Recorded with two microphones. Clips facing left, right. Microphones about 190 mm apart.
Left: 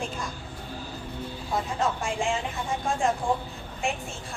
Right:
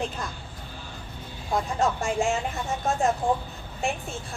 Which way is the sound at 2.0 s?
45° right (ahead or behind).